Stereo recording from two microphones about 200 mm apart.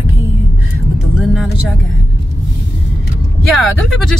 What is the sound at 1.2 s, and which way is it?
Music, 5° right (ahead or behind).